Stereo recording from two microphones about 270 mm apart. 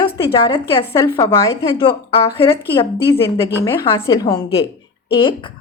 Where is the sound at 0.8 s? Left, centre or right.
Centre.